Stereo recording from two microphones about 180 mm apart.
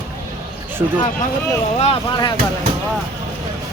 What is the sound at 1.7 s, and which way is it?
Speech, 35° left (ahead or behind).